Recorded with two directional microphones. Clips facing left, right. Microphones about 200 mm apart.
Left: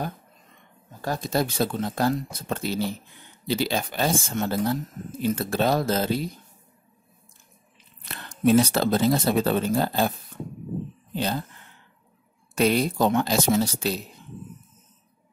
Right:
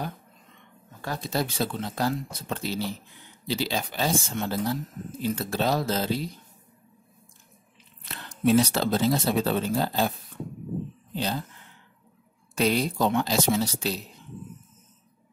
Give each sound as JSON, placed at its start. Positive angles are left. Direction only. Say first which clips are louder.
{"t": 1.0, "sound": "speech", "louder": "left 4 dB", "side_deg": 45}
{"t": 8.0, "sound": "speech", "louder": "left 3 dB", "side_deg": 50}
{"t": 11.1, "sound": "speech", "louder": "left 2 dB", "side_deg": 50}
{"t": 12.5, "sound": "speech", "louder": "left 3 dB", "side_deg": 50}